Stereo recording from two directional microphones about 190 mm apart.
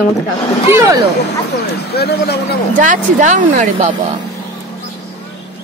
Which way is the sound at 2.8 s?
40° right (ahead or behind).